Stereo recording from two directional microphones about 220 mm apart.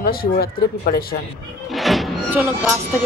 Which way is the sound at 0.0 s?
45° left (ahead or behind).